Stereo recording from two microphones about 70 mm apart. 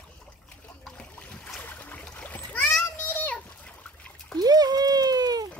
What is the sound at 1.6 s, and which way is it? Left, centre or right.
Splash, left.